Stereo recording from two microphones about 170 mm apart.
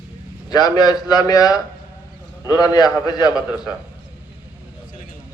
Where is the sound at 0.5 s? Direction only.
25° left (ahead or behind).